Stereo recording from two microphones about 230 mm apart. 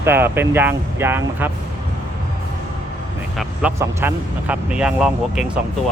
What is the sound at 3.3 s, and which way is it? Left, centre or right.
Speech, centre.